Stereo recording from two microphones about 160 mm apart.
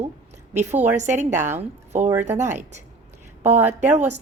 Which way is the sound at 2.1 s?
15° right (ahead or behind).